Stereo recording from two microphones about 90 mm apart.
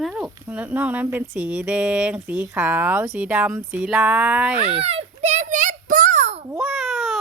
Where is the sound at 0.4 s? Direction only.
20° right (ahead or behind).